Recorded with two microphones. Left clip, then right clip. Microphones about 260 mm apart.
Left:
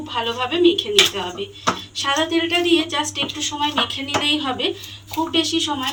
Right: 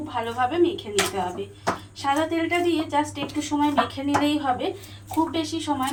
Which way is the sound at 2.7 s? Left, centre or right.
Right.